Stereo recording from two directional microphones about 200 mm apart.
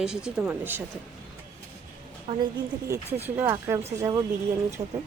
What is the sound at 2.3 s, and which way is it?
Speech, 30° right (ahead or behind).